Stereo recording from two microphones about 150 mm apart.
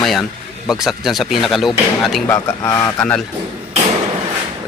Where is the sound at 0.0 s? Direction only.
Centre (ahead or behind).